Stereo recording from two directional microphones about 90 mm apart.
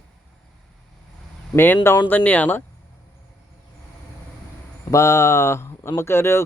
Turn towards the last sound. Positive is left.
turn(degrees=30)  # may be behind; listen again after turning